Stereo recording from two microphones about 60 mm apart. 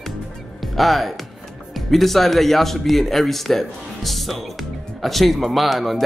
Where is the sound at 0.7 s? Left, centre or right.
Centre.